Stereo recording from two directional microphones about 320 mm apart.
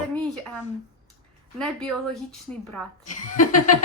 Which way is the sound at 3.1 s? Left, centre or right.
Left.